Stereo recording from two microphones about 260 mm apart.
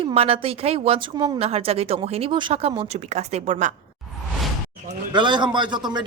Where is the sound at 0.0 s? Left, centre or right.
Right.